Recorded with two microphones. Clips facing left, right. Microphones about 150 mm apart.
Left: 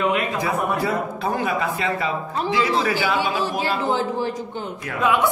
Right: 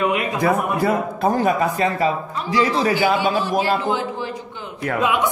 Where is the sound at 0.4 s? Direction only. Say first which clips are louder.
Right 3 dB; 50° right (ahead or behind).